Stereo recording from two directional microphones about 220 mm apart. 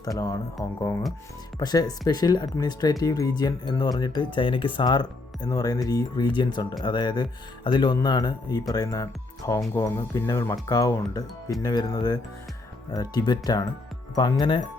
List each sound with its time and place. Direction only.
0.0 s speech: 15° left (ahead or behind)